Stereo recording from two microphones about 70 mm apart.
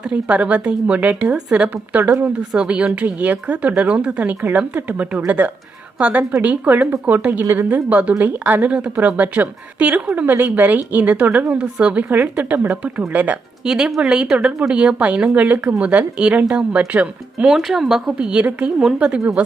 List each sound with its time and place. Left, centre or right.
0.0 s a woman's voice: centre
2.6 s a woman's voice: centre
13.7 s speech: centre